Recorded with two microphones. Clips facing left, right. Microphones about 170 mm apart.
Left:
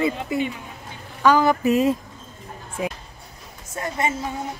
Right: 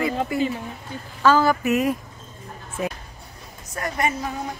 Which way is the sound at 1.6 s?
30° left (ahead or behind).